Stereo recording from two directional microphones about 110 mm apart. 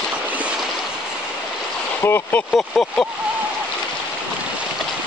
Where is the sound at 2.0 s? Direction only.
20° left (ahead or behind).